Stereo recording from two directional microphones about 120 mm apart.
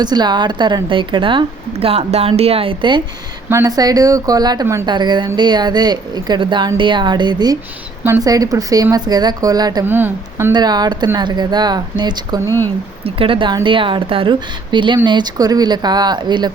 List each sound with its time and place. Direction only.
0.0 s a woman's voice: 35° right (ahead or behind)
3.7 s speech: 30° right (ahead or behind)
4.6 s a woman's voice: 20° right (ahead or behind)
4.9 s speech: 40° right (ahead or behind)
9.8 s speech: 15° right (ahead or behind)
10.5 s speech: 35° right (ahead or behind)
12.5 s speech: 20° left (ahead or behind)
13.1 s a woman's voice: 50° right (ahead or behind)